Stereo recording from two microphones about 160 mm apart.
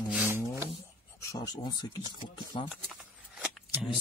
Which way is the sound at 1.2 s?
20° left (ahead or behind).